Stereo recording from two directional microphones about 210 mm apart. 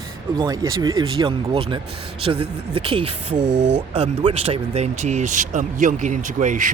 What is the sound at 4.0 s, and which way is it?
Speech, 30° right (ahead or behind).